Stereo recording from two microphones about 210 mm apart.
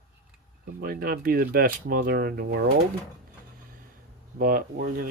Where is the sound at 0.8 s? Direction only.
45° right (ahead or behind).